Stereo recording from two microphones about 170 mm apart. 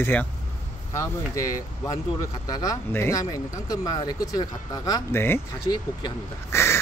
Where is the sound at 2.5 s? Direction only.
15° left (ahead or behind).